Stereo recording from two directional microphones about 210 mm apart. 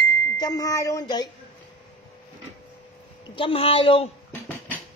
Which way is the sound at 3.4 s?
25° left (ahead or behind).